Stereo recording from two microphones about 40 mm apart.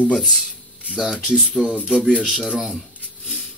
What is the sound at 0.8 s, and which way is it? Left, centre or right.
Speech, centre.